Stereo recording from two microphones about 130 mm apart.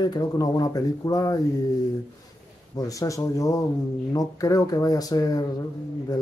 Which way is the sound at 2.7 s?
25° left (ahead or behind).